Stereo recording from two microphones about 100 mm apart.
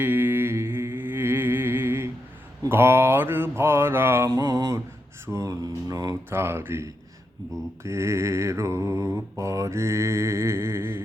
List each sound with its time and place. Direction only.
0.0 s humming: 20° right (ahead or behind)
2.6 s mantra: 25° right (ahead or behind)
5.2 s a sound: 30° right (ahead or behind)
6.3 s mantra: 25° right (ahead or behind)